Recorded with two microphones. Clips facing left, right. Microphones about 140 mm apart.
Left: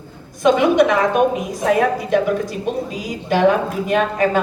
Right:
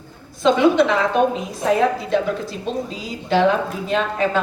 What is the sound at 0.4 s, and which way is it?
A woman's voice, 15° left (ahead or behind).